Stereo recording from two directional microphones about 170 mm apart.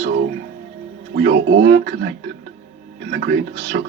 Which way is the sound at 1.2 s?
80° right.